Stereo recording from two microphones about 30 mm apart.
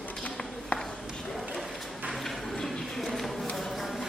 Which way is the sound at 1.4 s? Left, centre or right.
Centre.